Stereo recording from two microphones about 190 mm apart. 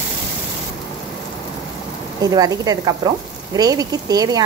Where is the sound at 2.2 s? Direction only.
20° right (ahead or behind).